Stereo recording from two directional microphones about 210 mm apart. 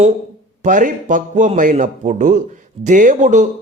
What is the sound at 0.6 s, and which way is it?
Speech, 35° right (ahead or behind).